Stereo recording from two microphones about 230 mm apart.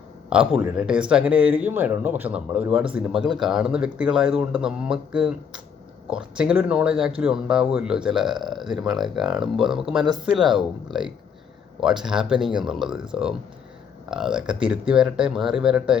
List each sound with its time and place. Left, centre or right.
0.3 s speech: centre
11.8 s speech: centre